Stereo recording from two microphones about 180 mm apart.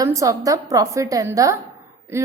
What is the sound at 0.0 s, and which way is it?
A woman's voice, 15° right (ahead or behind).